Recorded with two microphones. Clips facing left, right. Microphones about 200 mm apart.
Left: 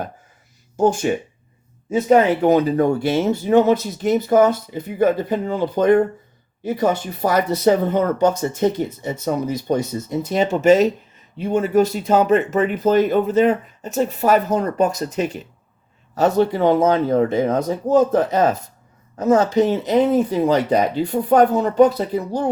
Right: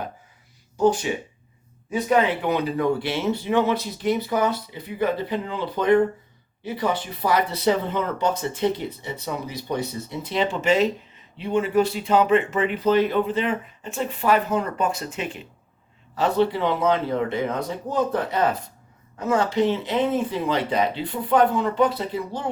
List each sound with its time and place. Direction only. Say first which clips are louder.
0.8 s speech: left 2 dB; 50° left (ahead or behind)
2.0 s speech: left 7 dB; 45° left (ahead or behind)